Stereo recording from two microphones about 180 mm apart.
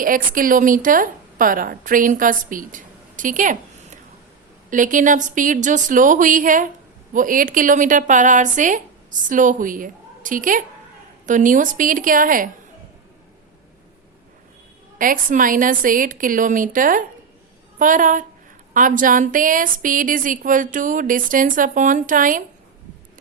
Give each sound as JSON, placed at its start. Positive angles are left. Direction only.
{"t": 0.0, "sound": "a woman's voice", "side_deg": -50}
{"t": 14.9, "sound": "a woman's voice", "side_deg": -50}